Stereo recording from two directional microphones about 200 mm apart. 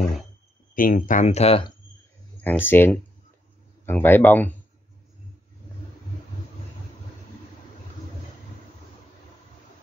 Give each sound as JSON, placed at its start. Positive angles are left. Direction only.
{"t": 0.7, "sound": "speech", "side_deg": 40}
{"t": 2.4, "sound": "speech", "side_deg": 10}